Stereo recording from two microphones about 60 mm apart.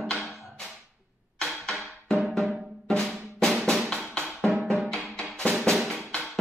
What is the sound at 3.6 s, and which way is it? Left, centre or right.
Drum, centre.